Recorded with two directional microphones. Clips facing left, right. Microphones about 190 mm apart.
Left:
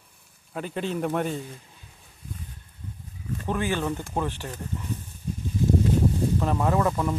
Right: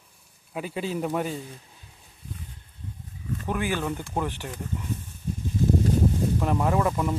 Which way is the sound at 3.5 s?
15° right (ahead or behind).